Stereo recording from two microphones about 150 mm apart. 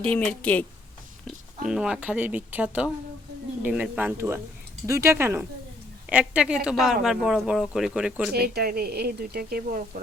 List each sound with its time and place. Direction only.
0.0 s a woman's voice: 10° left (ahead or behind)
1.6 s speech: 5° right (ahead or behind)
8.3 s a woman's voice: 90° right